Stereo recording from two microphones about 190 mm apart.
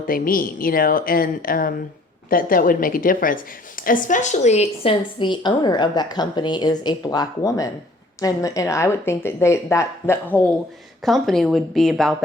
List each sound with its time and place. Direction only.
0.1 s a woman's voice: 50° left (ahead or behind); by 12.1 s centre (ahead or behind)